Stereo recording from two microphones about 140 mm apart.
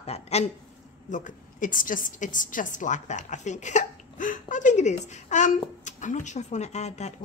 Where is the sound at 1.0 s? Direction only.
65° left (ahead or behind).